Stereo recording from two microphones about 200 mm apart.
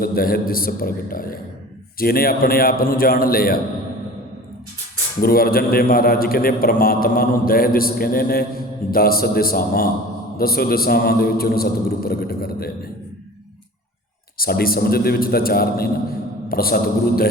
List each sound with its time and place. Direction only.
0.0 s a man's voice: 50° left (ahead or behind)
5.2 s a man's voice: 50° left (ahead or behind)
14.3 s a man's voice: 50° left (ahead or behind)